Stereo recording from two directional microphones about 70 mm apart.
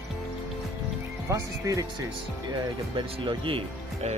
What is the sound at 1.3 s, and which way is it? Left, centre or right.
Speech, right.